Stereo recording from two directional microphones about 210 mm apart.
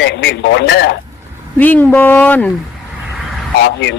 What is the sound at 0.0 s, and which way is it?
Speech, 55° left (ahead or behind).